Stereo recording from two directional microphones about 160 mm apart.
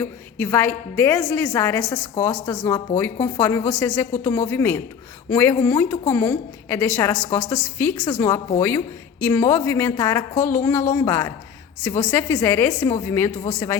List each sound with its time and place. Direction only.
0.0 s a woman's voice: 15° left (ahead or behind)